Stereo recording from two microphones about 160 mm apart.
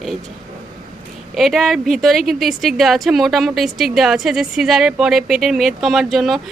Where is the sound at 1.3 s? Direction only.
Centre (ahead or behind).